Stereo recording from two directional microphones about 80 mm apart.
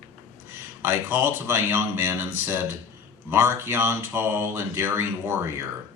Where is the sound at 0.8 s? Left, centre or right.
Right.